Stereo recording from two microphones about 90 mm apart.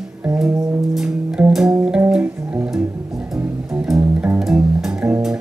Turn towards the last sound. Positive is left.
turn(degrees=-15)  # may be behind; listen again after turning